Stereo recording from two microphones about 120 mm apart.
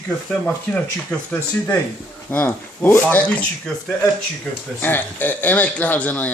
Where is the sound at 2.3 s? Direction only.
15° left (ahead or behind).